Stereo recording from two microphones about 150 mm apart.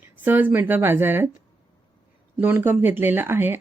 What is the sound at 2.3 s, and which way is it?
Speech, 15° right (ahead or behind).